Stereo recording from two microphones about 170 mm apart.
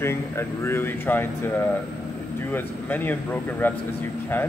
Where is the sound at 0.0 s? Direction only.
15° left (ahead or behind).